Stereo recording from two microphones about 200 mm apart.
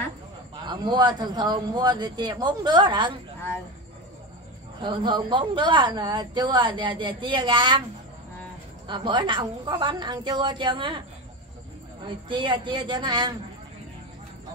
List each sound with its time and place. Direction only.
0.7 s a woman's voice: 20° right (ahead or behind)
4.8 s a woman's voice: 20° right (ahead or behind)
8.8 s a woman's voice: 25° right (ahead or behind)